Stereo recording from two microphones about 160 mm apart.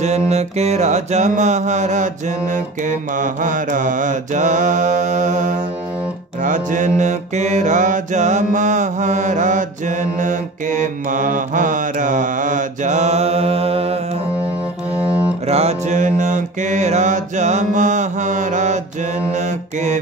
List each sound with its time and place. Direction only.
0.0 s mantra: 45° right (ahead or behind)
15.0 s music: 10° right (ahead or behind)
15.4 s mantra: 40° right (ahead or behind)